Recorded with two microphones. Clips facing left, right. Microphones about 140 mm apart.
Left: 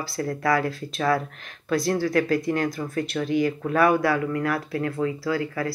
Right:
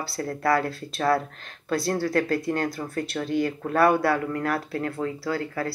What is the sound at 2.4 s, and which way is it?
Speech, 25° right (ahead or behind).